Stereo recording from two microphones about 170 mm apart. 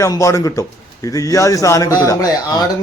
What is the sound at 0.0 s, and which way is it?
A man's voice, 15° left (ahead or behind).